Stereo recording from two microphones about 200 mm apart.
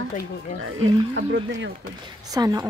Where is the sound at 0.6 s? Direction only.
80° right; by 1.7 s 65° right (ahead or behind).